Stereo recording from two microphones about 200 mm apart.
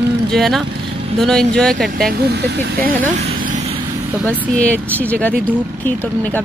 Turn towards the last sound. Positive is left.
turn(degrees=5)  # may be behind; listen again after turning